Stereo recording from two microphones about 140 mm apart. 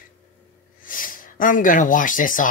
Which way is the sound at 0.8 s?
80° left.